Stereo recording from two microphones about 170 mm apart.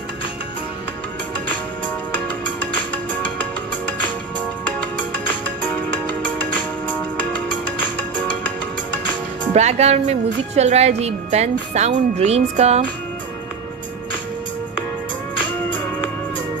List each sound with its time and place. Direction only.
2.9 s music: 10° left (ahead or behind)
9.5 s a woman's voice: 40° right (ahead or behind)
15.3 s music: 30° left (ahead or behind)